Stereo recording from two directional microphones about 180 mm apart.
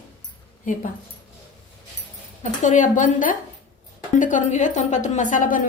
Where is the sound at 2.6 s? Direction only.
45° left (ahead or behind).